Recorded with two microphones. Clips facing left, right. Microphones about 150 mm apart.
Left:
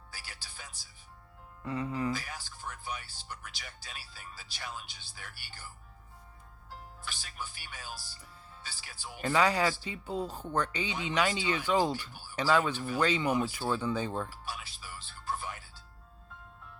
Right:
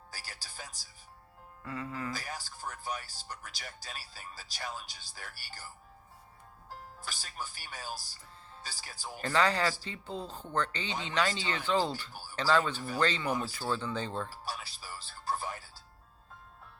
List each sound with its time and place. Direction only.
0.1 s music: 40° right (ahead or behind)
1.6 s speech: 20° left (ahead or behind)
2.1 s speech: 40° right (ahead or behind)
9.2 s speech: 10° left (ahead or behind)
12.1 s speech: 40° right (ahead or behind)
12.4 s speech: 10° left (ahead or behind)
14.3 s music: 40° right (ahead or behind)